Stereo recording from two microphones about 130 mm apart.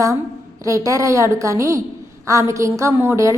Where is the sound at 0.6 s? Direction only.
25° right (ahead or behind).